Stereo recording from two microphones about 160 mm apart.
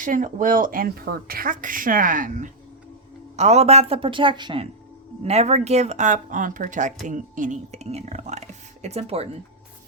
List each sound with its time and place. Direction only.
0.0 s speech: 55° right (ahead or behind)
3.3 s a woman's voice: 40° right (ahead or behind)
5.2 s speech: 45° right (ahead or behind)